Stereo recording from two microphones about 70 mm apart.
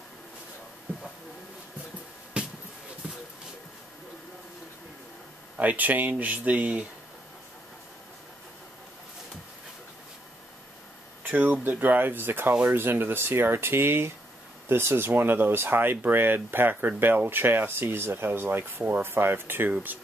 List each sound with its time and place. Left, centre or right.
2.4 s music: centre
5.6 s speech: right
11.2 s speech: right